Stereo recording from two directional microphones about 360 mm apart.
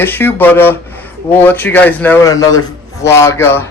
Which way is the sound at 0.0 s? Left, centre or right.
Centre.